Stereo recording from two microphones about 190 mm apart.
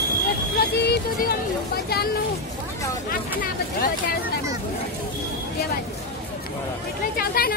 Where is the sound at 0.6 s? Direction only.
55° left (ahead or behind).